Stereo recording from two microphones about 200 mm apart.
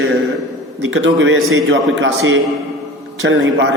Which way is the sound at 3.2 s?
75° right (ahead or behind).